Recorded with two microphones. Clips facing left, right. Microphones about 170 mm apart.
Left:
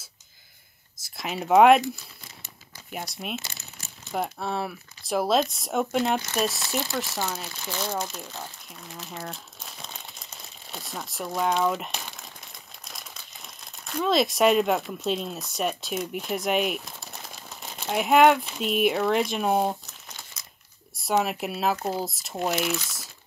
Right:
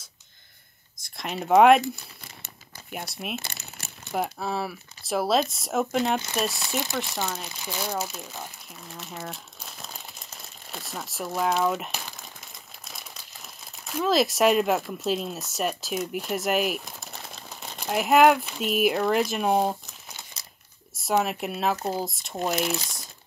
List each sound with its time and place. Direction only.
1.0 s speech: centre (ahead or behind)
2.9 s speech: centre (ahead or behind)
3.4 s crumpling: 65° right (ahead or behind)
4.1 s speech: centre (ahead or behind)
7.6 s speech: 10° right (ahead or behind)
20.4 s crumpling: 30° right (ahead or behind)
21.0 s speech: centre (ahead or behind)
22.6 s speech: 35° right (ahead or behind)